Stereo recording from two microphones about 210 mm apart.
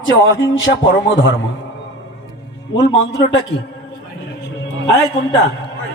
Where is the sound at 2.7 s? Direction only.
55° left (ahead or behind).